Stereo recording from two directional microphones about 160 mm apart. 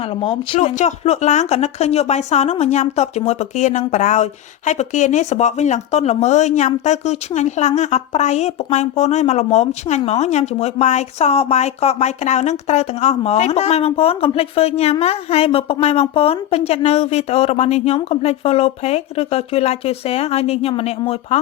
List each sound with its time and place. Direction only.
0.2 s speech: 35° left (ahead or behind)
0.8 s speech: 45° left (ahead or behind)